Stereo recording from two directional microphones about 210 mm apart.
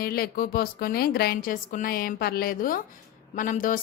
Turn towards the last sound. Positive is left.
turn(degrees=40)  # may be behind; listen again after turning